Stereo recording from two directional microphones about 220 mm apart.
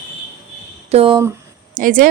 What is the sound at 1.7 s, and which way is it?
Speech, 40° right (ahead or behind).